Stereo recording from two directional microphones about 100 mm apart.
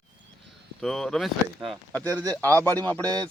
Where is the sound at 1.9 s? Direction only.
15° left (ahead or behind).